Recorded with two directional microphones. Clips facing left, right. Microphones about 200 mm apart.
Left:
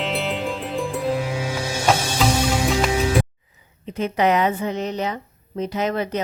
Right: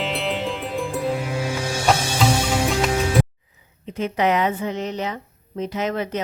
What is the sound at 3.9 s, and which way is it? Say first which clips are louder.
A woman's voice: left 1 dB; 40° left (ahead or behind).